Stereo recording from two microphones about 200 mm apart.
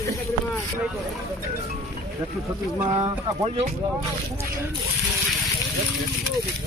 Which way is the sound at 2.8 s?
20° right (ahead or behind).